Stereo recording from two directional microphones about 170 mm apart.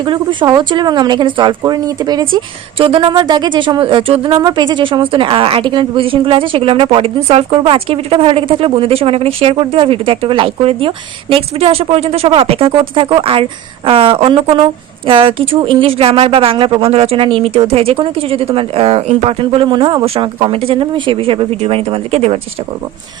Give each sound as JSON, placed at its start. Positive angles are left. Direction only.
{"t": 0.0, "sound": "speech", "side_deg": -30}